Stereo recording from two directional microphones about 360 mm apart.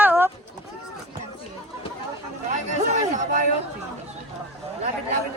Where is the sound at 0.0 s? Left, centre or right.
Centre.